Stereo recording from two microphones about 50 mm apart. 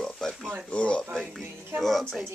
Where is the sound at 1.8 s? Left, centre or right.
Centre.